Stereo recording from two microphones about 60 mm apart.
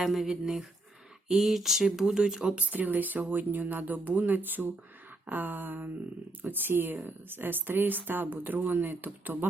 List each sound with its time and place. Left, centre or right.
0.0 s speech: centre
2.6 s speech: right